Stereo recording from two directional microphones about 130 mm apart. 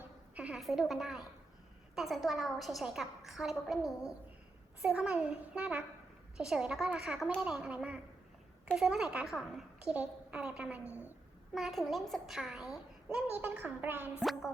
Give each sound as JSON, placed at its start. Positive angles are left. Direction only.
{"t": 0.3, "sound": "a woman's voice", "side_deg": -5}
{"t": 10.8, "sound": "a woman's voice", "side_deg": 20}
{"t": 11.5, "sound": "a woman's voice", "side_deg": 0}
{"t": 14.2, "sound": "a woman's voice", "side_deg": -5}